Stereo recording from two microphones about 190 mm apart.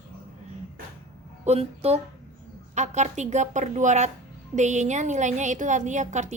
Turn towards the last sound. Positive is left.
turn(degrees=-40)  # may be behind; listen again after turning